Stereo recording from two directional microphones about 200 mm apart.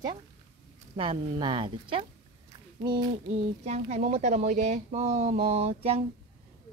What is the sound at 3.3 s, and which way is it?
Speech, 35° right (ahead or behind).